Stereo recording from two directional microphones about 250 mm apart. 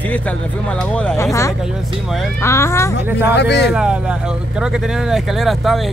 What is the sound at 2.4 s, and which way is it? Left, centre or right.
Speech, centre.